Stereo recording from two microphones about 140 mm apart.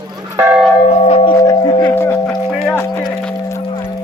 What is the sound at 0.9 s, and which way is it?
Tubular bells, 45° left (ahead or behind).